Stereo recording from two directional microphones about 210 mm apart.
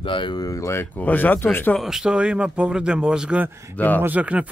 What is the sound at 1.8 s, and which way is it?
Speech, 5° right (ahead or behind).